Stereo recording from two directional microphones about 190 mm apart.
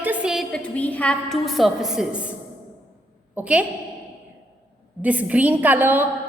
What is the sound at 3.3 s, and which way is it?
Speech, 5° right (ahead or behind).